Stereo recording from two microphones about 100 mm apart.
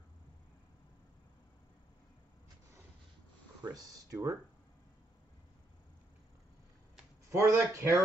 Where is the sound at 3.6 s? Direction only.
40° right (ahead or behind).